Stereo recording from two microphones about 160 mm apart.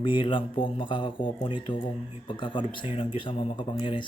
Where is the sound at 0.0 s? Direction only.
30° left (ahead or behind).